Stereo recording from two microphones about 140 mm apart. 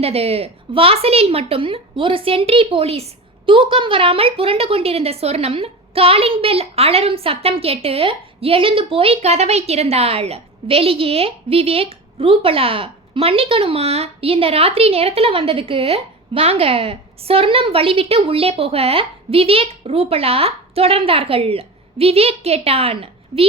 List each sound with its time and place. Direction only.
0.0 s a woman's voice: 45° right (ahead or behind)